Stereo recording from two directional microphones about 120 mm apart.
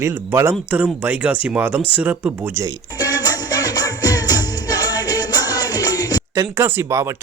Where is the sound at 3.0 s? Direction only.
35° left (ahead or behind).